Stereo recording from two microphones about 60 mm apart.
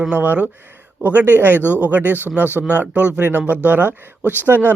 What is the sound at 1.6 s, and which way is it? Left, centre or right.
Speech, left.